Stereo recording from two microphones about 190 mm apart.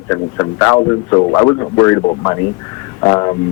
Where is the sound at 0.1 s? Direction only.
20° left (ahead or behind).